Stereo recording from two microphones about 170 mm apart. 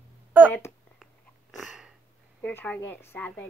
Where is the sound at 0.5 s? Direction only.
15° left (ahead or behind).